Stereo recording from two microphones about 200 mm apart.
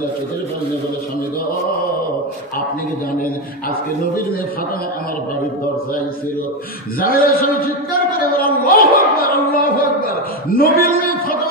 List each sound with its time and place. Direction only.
7.0 s a woman's voice: 45° left (ahead or behind)